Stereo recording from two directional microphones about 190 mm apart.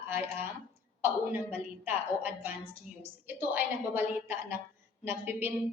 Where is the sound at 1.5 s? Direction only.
10° right (ahead or behind).